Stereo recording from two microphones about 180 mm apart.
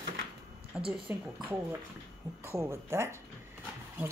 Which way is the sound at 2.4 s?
15° right (ahead or behind).